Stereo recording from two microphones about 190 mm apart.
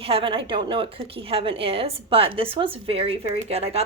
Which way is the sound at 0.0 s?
30° right (ahead or behind).